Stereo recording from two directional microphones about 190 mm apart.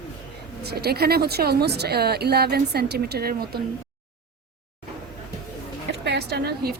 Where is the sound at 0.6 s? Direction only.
60° right (ahead or behind).